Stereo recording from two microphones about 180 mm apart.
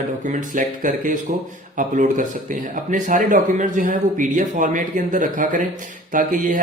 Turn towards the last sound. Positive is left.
turn(degrees=-45)  # may be behind; listen again after turning